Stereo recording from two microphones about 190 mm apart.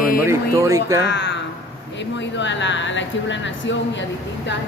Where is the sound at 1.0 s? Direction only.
65° left (ahead or behind).